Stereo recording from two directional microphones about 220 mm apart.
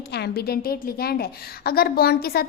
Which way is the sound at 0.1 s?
45° left (ahead or behind).